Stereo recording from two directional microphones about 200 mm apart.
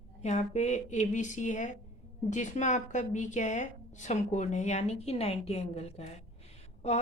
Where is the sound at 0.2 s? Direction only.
35° left (ahead or behind).